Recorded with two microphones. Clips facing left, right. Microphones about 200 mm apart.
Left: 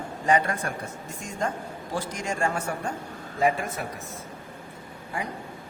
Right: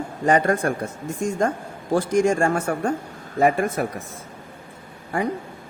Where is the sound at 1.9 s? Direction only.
50° right (ahead or behind).